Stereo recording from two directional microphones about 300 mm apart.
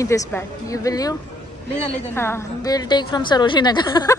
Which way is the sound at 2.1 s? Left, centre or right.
Centre.